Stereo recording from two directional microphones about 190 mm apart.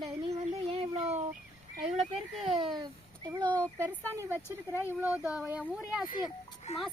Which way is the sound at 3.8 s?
10° left (ahead or behind).